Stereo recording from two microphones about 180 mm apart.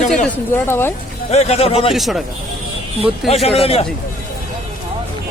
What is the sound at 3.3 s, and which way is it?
Speech, 35° left (ahead or behind).